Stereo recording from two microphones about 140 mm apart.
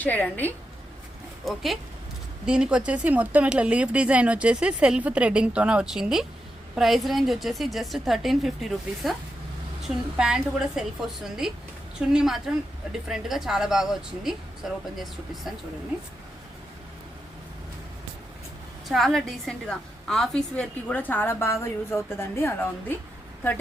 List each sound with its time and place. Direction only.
0.0 s a woman's voice: 10° left (ahead or behind)
1.5 s a woman's voice: centre (ahead or behind)
18.9 s a woman's voice: centre (ahead or behind); by 23.0 s 15° left (ahead or behind)